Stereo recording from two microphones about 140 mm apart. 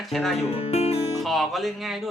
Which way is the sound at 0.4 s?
45° left (ahead or behind).